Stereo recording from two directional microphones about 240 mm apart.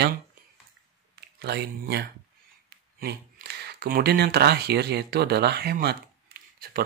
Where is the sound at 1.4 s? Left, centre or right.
Right.